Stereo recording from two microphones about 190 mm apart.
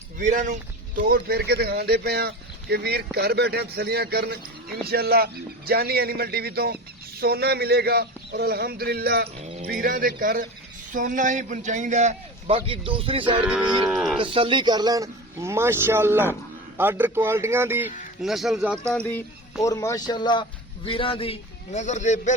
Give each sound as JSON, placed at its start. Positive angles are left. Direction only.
{"t": 0.2, "sound": "speech", "side_deg": -45}
{"t": 9.4, "sound": "a sound", "side_deg": -30}
{"t": 9.6, "sound": "a man's voice", "side_deg": -50}
{"t": 13.4, "sound": "speech", "side_deg": -5}
{"t": 14.2, "sound": "a man's voice", "side_deg": -25}
{"t": 18.2, "sound": "speech", "side_deg": 0}
{"t": 18.9, "sound": "a sound", "side_deg": 5}
{"t": 19.6, "sound": "a man's voice", "side_deg": 15}